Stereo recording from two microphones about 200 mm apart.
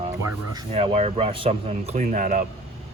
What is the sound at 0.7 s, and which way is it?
Speech, 30° right (ahead or behind).